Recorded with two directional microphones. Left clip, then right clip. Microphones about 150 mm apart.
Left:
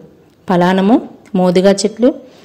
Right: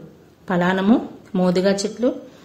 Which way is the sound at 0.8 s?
40° left (ahead or behind).